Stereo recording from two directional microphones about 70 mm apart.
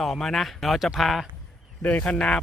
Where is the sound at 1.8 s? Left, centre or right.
Centre.